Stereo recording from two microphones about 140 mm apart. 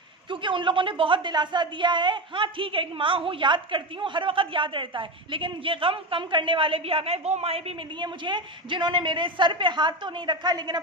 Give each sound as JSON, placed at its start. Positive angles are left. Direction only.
{"t": 0.3, "sound": "a woman's voice", "side_deg": -35}